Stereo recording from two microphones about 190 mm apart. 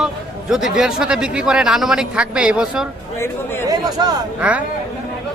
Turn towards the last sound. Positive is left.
turn(degrees=-5)  # may be behind; listen again after turning